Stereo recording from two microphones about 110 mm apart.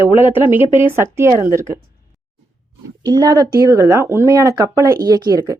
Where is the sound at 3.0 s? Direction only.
40° right (ahead or behind).